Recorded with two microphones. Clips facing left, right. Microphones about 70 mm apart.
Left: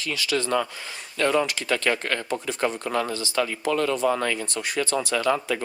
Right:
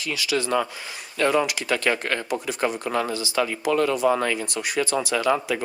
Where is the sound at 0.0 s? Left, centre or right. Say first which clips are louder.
Right 1 dB; centre.